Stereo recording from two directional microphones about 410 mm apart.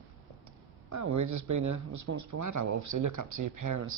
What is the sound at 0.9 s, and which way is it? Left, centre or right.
Speech, right.